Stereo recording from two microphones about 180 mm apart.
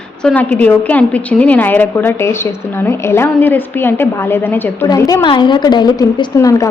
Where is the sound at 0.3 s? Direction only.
10° left (ahead or behind).